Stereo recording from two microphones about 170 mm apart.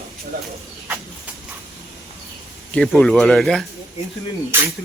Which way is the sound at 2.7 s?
Centre (ahead or behind).